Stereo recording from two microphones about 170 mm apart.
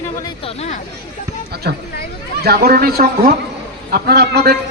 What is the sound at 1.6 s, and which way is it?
A man's voice, 75° right (ahead or behind).